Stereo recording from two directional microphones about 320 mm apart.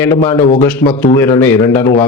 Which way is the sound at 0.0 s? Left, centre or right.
Centre.